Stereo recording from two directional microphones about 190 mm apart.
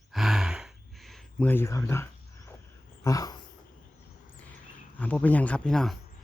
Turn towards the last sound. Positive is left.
turn(degrees=5)  # may be behind; listen again after turning